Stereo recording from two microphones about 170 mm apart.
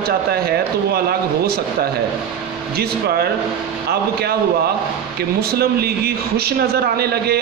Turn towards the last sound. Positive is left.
turn(degrees=-65)  # may be behind; listen again after turning